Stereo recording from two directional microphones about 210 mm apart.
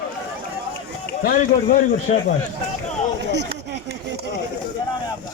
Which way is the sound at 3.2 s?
55° right (ahead or behind).